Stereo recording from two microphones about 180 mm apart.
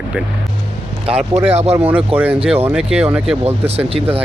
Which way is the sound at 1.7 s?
10° right (ahead or behind).